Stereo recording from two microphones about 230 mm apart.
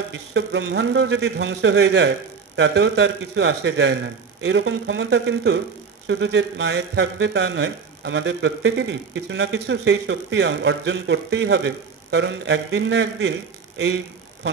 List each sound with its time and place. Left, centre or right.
0.1 s a man's voice: right